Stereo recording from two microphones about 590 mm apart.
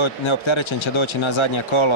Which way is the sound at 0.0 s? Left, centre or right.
Left.